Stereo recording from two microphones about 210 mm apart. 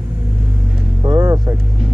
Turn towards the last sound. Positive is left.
turn(degrees=-15)  # may be behind; listen again after turning